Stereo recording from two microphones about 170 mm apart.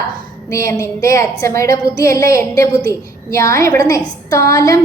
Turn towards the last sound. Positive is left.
turn(degrees=20)  # may be behind; listen again after turning